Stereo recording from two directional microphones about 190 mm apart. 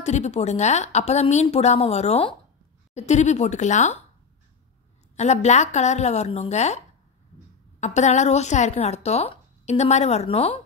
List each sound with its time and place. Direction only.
0.0 s speech: 35° left (ahead or behind)
5.1 s speech: 35° left (ahead or behind)
7.8 s speech: 40° left (ahead or behind)